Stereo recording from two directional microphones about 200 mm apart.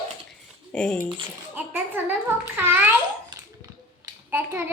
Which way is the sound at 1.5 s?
10° right (ahead or behind).